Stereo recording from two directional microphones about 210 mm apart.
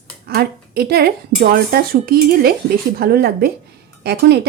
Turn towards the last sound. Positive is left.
turn(degrees=-50)  # may be behind; listen again after turning